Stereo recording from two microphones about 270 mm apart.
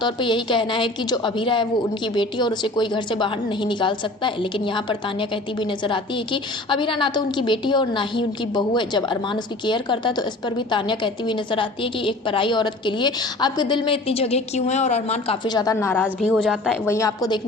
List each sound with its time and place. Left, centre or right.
0.0 s a woman's voice: centre